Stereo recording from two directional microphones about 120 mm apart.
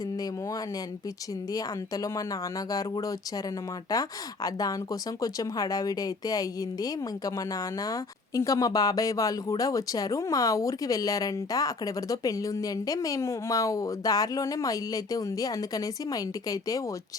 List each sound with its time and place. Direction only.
1.5 s speech: 30° left (ahead or behind)